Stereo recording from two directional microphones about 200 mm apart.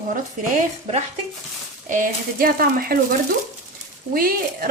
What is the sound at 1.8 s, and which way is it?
Speech, 40° right (ahead or behind).